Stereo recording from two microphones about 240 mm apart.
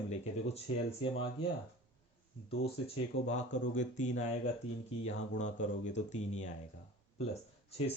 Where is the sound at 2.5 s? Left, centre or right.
Left.